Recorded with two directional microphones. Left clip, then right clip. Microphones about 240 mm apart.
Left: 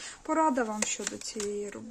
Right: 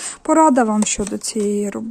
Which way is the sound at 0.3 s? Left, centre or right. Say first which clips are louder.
Right 14 dB; right.